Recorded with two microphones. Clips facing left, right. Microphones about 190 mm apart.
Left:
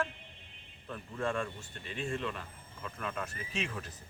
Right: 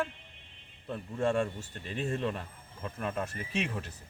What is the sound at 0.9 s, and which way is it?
A man's voice, 30° right (ahead or behind).